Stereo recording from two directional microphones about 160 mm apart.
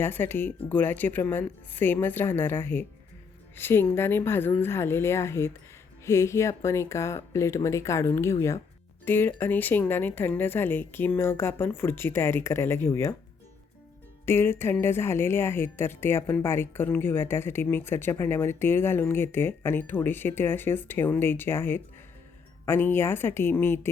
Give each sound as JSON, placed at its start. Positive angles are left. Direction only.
{"t": 0.0, "sound": "speech", "side_deg": 15}
{"t": 14.3, "sound": "speech", "side_deg": 15}